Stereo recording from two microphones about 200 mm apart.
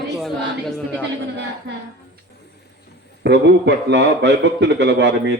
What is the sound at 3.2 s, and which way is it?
A man's voice, 55° right (ahead or behind).